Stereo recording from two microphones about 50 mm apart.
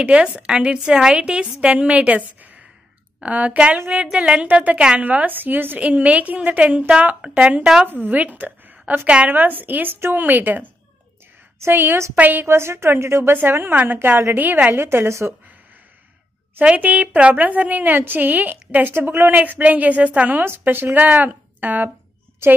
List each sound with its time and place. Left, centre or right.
0.0 s a woman's voice: right
5.0 s a woman's voice: right
5.8 s a woman's voice: right
7.8 s a woman's voice: right
9.0 s a woman's voice: right
9.3 s a woman's voice: right
11.7 s a woman's voice: right
12.4 s a woman's voice: right
13.4 s a woman's voice: right
14.3 s a woman's voice: right
16.7 s a woman's voice: right
18.9 s a woman's voice: right
20.4 s a woman's voice: right